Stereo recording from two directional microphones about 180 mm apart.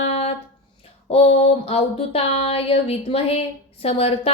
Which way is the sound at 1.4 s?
35° left (ahead or behind).